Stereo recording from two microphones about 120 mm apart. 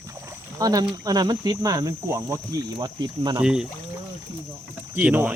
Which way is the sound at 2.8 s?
35° right (ahead or behind).